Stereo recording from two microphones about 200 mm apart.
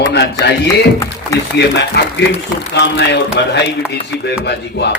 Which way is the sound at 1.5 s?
55° left (ahead or behind).